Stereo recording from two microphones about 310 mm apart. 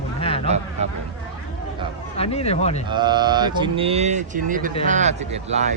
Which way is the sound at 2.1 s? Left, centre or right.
Centre.